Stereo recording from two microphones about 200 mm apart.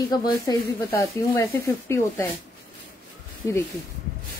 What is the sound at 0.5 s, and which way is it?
Speech, 15° left (ahead or behind).